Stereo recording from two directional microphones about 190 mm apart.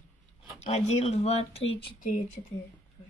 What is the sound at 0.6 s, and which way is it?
Speech, 35° left (ahead or behind).